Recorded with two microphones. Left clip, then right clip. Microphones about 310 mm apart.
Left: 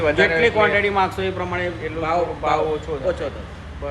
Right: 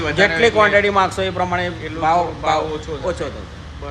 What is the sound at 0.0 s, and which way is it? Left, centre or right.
Speech, centre.